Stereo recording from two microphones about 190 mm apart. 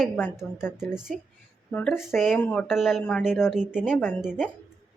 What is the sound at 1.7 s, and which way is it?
Speech, 10° left (ahead or behind).